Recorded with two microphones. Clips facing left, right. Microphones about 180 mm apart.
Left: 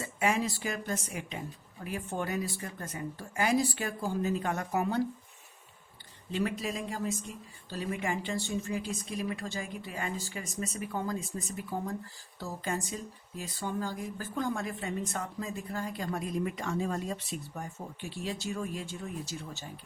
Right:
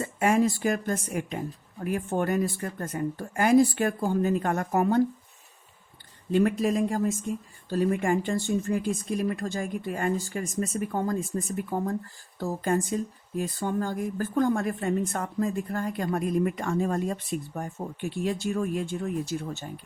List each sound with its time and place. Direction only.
0.0 s speech: 50° right (ahead or behind)
6.3 s speech: 50° right (ahead or behind)